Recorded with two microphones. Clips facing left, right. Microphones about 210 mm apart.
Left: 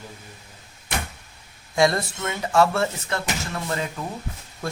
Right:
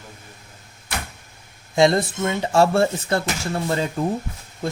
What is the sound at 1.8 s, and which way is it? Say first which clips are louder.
Speech: right 4 dB; 25° right (ahead or behind).